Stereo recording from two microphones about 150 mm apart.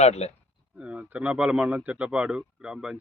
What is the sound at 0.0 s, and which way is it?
Speech, 45° left (ahead or behind).